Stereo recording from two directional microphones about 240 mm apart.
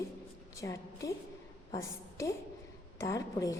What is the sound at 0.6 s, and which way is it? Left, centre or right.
A woman's voice, centre.